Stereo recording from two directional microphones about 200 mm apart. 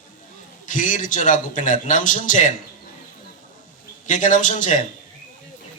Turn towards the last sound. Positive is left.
turn(degrees=40)  # may be behind; listen again after turning